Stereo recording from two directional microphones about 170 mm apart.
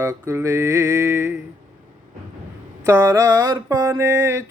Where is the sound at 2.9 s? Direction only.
15° right (ahead or behind).